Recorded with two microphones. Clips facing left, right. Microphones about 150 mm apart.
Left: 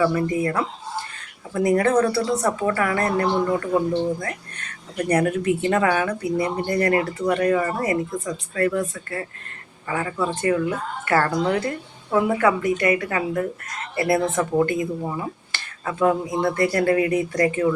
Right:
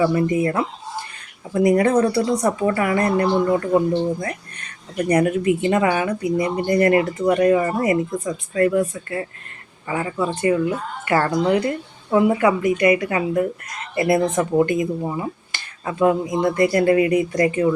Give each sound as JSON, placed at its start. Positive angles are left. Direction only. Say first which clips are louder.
{"t": 0.0, "sound": "speech", "louder": "right 3 dB", "side_deg": -20}
{"t": 5.0, "sound": "speech", "louder": "right 3 dB", "side_deg": -10}